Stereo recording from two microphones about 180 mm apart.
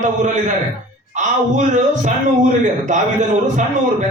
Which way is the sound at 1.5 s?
40° right (ahead or behind).